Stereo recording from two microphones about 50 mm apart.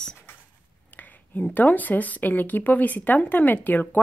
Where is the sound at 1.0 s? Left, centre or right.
Left.